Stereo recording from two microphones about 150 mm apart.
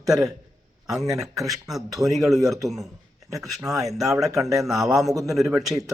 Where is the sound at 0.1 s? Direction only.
Centre (ahead or behind).